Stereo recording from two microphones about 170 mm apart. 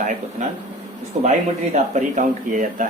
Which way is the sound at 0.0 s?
45° right (ahead or behind).